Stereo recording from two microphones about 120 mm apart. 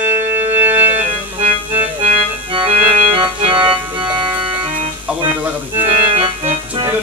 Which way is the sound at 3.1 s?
45° right (ahead or behind).